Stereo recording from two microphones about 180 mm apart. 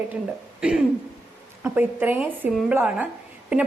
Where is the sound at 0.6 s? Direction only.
5° right (ahead or behind).